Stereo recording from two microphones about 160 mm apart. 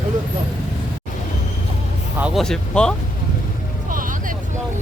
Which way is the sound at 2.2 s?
Centre (ahead or behind).